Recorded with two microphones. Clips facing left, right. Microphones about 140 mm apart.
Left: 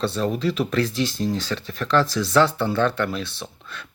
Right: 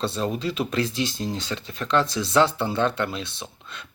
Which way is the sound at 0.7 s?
25° right (ahead or behind).